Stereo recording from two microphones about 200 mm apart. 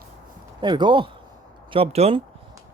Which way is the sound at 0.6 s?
20° right (ahead or behind).